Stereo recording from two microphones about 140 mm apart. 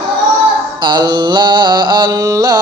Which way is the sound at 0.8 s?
35° right (ahead or behind).